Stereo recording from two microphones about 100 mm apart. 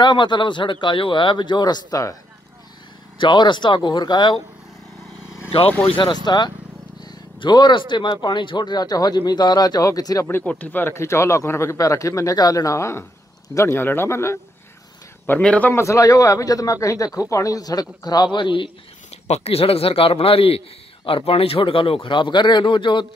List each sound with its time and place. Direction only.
0.0 s a man's voice: 50° left (ahead or behind)
3.2 s a man's voice: 50° left (ahead or behind)
5.7 s a man's voice: 15° left (ahead or behind)
5.9 s a man's voice: 50° left (ahead or behind)
10.4 s speech: 15° left (ahead or behind)
15.2 s a man's voice: 15° left (ahead or behind)
15.7 s speech: 30° left (ahead or behind); by 18.7 s 55° left (ahead or behind)
19.0 s a man's voice: 90° left; by 23.0 s 55° left (ahead or behind)